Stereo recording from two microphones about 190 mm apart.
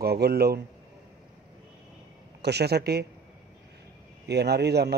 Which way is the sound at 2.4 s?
60° right (ahead or behind).